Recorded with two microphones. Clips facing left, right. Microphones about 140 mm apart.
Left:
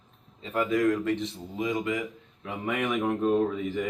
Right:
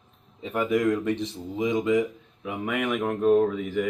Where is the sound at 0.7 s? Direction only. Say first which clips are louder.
Right 1 dB; 15° right (ahead or behind).